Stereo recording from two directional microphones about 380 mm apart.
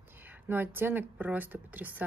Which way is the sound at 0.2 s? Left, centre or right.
Centre.